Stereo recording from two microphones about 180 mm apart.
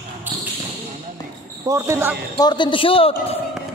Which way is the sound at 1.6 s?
15° right (ahead or behind).